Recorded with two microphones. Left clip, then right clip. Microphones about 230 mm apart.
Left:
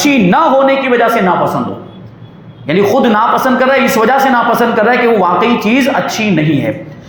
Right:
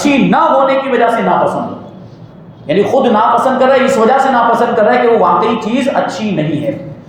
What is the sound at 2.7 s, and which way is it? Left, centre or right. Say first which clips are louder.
Speech: left 1 dB; left.